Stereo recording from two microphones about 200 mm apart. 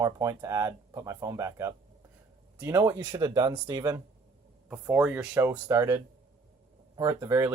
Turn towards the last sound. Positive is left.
turn(degrees=-15)  # may be behind; listen again after turning